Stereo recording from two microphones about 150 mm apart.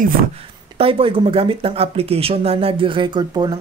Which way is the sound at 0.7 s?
40° right (ahead or behind).